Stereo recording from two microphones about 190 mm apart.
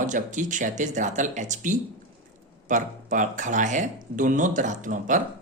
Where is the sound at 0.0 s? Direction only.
40° right (ahead or behind).